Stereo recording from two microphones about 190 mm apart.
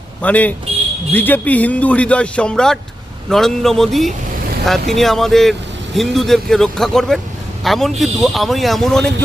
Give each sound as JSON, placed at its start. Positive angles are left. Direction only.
{"t": 0.2, "sound": "a man's voice", "side_deg": 10}